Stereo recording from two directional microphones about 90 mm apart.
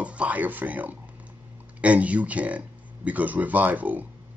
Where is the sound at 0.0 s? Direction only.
15° right (ahead or behind).